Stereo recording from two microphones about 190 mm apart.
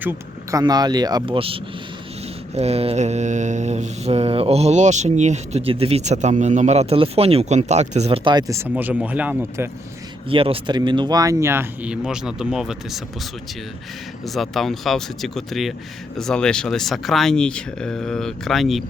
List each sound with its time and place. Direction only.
0.0 s speech: 10° right (ahead or behind)
0.6 s speech: 20° right (ahead or behind)
2.6 s mantra: 35° right (ahead or behind); by 9.4 s 10° right (ahead or behind)
10.2 s speech: 30° right (ahead or behind); by 13.0 s centre (ahead or behind)
14.3 s speech: centre (ahead or behind)